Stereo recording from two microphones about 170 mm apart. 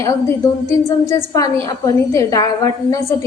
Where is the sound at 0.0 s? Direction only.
20° left (ahead or behind).